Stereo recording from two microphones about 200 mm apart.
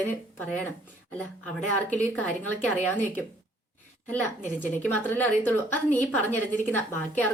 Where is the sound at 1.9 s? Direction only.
10° left (ahead or behind).